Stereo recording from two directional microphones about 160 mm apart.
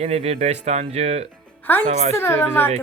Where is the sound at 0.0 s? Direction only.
40° right (ahead or behind).